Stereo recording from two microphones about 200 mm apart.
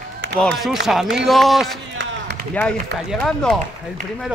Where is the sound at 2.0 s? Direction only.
65° right (ahead or behind).